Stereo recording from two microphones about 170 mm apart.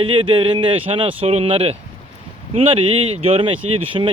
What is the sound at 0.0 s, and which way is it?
Speech, 30° right (ahead or behind).